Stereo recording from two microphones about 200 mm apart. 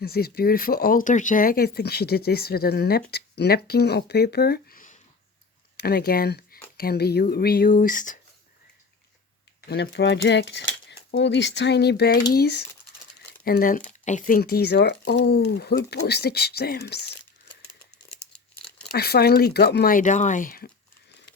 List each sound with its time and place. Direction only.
0.0 s speech: 50° left (ahead or behind)
9.6 s speech: 55° left (ahead or behind)
18.9 s speech: 55° left (ahead or behind)